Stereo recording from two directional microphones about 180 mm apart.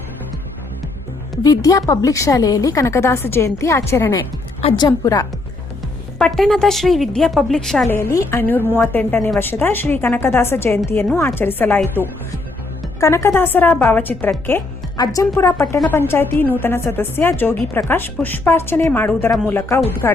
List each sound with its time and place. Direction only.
1.5 s a woman's voice: 20° left (ahead or behind)
6.1 s a woman's voice: 5° left (ahead or behind)